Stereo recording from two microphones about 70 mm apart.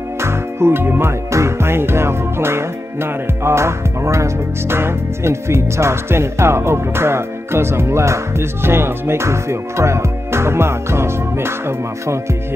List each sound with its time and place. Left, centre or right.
0.2 s music: right